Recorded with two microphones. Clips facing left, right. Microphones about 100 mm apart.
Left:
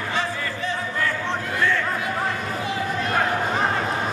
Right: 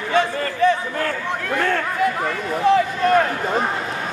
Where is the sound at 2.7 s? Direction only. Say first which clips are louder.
Right 17 dB; 60° right (ahead or behind).